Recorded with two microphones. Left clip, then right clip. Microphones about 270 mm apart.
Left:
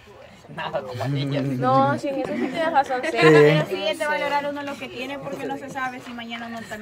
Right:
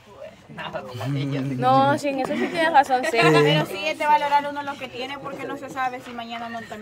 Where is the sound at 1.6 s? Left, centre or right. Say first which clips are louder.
Right 2 dB; right.